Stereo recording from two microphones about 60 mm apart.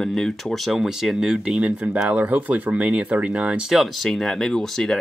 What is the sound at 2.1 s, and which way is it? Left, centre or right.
Speech, right.